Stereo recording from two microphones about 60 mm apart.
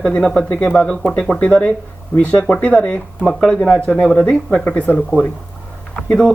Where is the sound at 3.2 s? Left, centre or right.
Centre.